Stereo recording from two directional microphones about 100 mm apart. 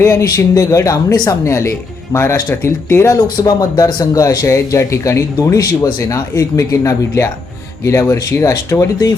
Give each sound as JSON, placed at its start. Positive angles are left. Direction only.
{"t": 0.0, "sound": "speech", "side_deg": 30}
{"t": 1.5, "sound": "speech", "side_deg": 30}
{"t": 3.2, "sound": "speech", "side_deg": 40}